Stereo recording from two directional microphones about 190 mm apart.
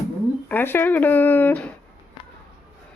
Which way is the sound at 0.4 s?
10° left (ahead or behind).